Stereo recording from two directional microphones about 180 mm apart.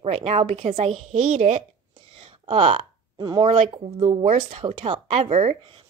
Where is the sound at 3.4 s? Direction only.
35° right (ahead or behind).